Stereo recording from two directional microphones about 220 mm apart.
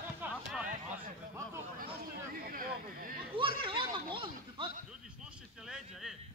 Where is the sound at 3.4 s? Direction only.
25° right (ahead or behind).